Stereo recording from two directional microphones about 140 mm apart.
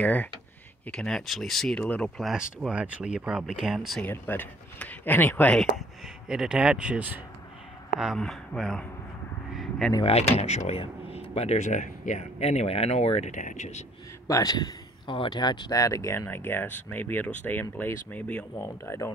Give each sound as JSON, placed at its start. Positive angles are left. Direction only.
{"t": 0.0, "sound": "speech", "side_deg": 10}
{"t": 2.6, "sound": "speech", "side_deg": -10}
{"t": 4.0, "sound": "speech", "side_deg": 15}
{"t": 5.6, "sound": "speech", "side_deg": -5}
{"t": 9.6, "sound": "a sound", "side_deg": 5}
{"t": 10.0, "sound": "speech", "side_deg": 50}
{"t": 14.2, "sound": "speech", "side_deg": 25}